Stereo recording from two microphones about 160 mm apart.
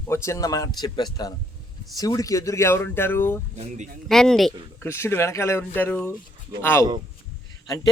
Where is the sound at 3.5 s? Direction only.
45° right (ahead or behind).